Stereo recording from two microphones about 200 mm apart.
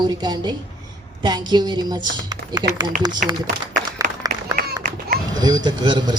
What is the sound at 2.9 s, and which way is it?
Speech, 40° right (ahead or behind).